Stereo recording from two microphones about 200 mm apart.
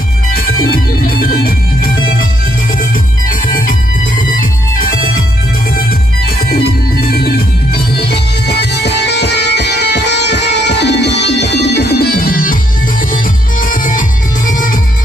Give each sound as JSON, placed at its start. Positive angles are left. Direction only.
{"t": 0.7, "sound": "music", "side_deg": 50}
{"t": 4.4, "sound": "music", "side_deg": 45}
{"t": 7.1, "sound": "music", "side_deg": 50}